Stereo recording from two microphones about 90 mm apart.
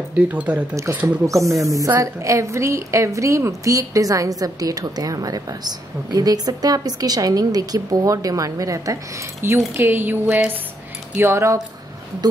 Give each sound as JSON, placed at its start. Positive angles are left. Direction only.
{"t": 0.3, "sound": "speech", "side_deg": -15}
{"t": 1.0, "sound": "a woman's voice", "side_deg": -35}
{"t": 9.4, "sound": "speech", "side_deg": -25}